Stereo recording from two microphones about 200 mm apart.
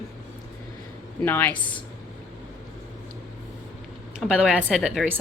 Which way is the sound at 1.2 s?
10° left (ahead or behind).